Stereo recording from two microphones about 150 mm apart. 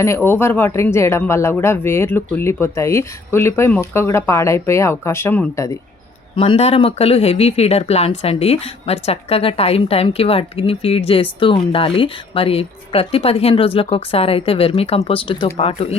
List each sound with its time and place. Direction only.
0.0 s speech: 15° left (ahead or behind)
6.3 s speech: 35° left (ahead or behind)